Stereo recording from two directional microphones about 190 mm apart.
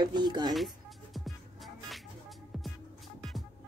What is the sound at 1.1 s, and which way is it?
Music, centre (ahead or behind).